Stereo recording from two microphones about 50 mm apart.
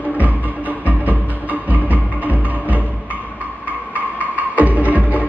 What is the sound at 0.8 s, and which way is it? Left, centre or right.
Music, right.